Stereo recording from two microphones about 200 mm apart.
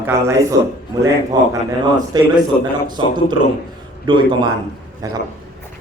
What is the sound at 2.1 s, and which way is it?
A man's voice, 20° right (ahead or behind).